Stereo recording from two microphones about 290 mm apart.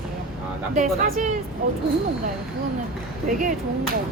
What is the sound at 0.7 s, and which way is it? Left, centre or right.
Speech, right.